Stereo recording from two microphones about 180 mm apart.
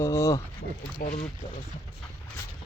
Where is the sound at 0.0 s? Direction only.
15° left (ahead or behind).